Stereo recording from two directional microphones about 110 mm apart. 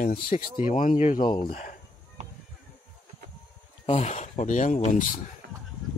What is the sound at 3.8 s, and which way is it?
Speech, 85° left.